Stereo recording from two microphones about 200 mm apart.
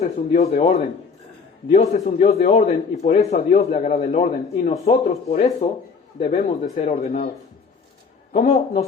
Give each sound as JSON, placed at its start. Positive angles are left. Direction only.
{"t": 0.0, "sound": "a man's voice", "side_deg": 35}
{"t": 1.9, "sound": "a man's voice", "side_deg": 35}
{"t": 8.3, "sound": "a man's voice", "side_deg": 30}